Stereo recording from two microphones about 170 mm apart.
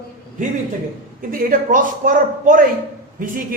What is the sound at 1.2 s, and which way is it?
A man's voice, 55° right (ahead or behind).